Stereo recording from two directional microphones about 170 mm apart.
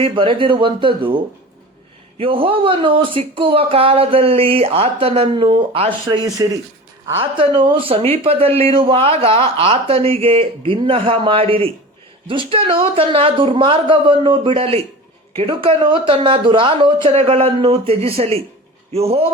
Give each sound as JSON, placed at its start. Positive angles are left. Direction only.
{"t": 0.0, "sound": "speech", "side_deg": -30}